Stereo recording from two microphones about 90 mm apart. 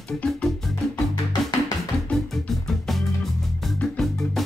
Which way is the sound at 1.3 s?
45° left (ahead or behind).